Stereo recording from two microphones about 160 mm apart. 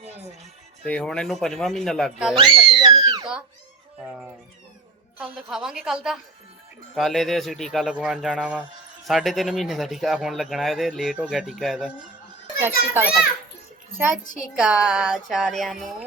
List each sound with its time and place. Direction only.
0.9 s speech: 5° left (ahead or behind)
2.3 s speech: 35° right (ahead or behind)
3.0 s a sound: 25° right (ahead or behind)
5.1 s speech: 10° right (ahead or behind)
12.5 s a child's voice: 15° right (ahead or behind)
14.5 s speech: 5° right (ahead or behind)